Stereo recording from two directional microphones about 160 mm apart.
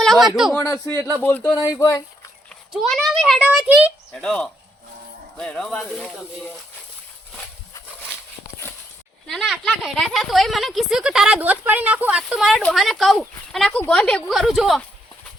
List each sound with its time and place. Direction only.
0.0 s a man's voice: centre (ahead or behind)
0.6 s a man's voice: 15° left (ahead or behind)
2.5 s a child's voice: centre (ahead or behind)
9.2 s speech: centre (ahead or behind)